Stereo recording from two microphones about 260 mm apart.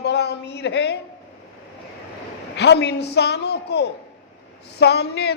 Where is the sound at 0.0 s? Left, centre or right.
Left.